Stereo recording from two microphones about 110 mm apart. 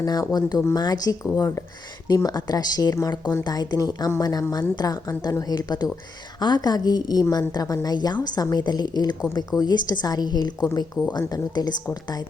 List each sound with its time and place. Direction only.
0.0 s a woman's voice: 35° left (ahead or behind)
1.4 s a woman's voice: 25° left (ahead or behind)